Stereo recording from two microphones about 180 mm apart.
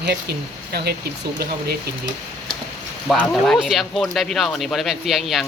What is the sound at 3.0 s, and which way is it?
Speech, centre (ahead or behind).